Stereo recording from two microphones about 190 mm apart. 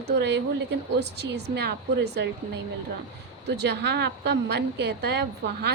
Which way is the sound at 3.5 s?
65° right (ahead or behind).